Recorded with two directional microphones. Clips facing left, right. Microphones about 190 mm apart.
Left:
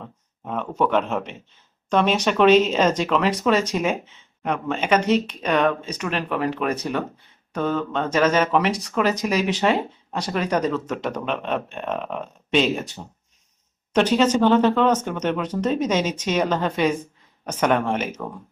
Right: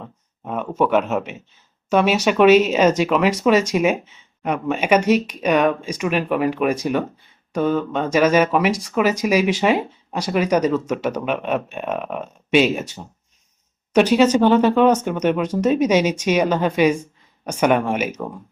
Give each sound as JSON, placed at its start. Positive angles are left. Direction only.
{"t": 0.0, "sound": "speech", "side_deg": -10}